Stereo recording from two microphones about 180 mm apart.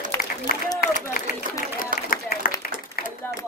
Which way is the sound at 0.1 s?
15° left (ahead or behind).